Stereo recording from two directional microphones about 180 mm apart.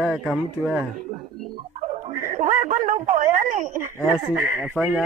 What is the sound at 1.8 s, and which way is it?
Bow-wow, 40° right (ahead or behind).